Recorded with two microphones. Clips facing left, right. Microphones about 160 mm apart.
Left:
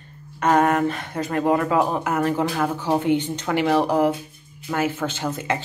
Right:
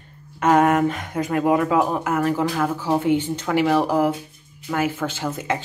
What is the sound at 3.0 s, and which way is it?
Speech, 5° right (ahead or behind).